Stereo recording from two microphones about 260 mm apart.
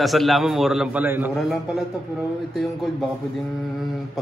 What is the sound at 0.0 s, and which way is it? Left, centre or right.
A man's voice, centre.